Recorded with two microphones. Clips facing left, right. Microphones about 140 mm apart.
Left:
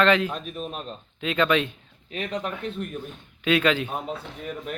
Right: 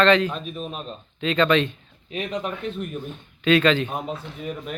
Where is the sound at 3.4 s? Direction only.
10° left (ahead or behind).